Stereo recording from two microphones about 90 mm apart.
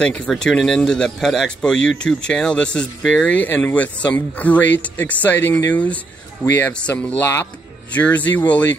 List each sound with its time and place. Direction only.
0.0 s speech: 10° left (ahead or behind)